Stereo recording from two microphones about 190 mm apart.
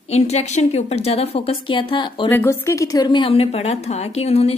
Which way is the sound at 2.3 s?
10° left (ahead or behind).